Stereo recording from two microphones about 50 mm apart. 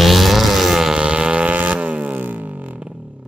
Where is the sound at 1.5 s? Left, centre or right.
Right.